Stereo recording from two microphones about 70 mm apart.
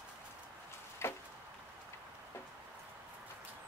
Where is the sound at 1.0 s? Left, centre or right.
Left.